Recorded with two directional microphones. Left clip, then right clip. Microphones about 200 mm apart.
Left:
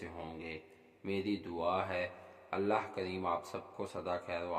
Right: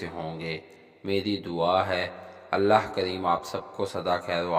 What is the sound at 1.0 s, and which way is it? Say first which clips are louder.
Speech: right 9 dB; 40° right (ahead or behind).